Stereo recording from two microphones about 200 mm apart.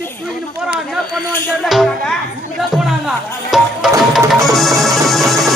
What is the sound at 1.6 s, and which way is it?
Music, centre (ahead or behind).